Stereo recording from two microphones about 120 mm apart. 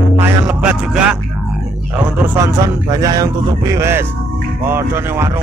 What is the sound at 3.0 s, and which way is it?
Speech, 30° right (ahead or behind).